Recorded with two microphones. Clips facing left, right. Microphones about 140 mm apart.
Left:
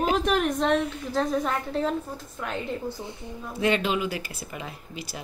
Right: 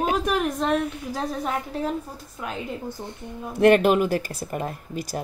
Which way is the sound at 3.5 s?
60° right (ahead or behind).